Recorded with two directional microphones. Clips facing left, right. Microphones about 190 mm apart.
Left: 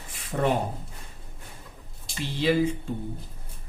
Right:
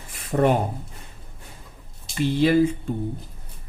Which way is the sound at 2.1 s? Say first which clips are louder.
Right 5 dB; 50° right (ahead or behind).